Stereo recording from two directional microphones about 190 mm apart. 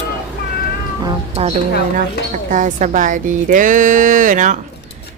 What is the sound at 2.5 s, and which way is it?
Speech, 40° right (ahead or behind).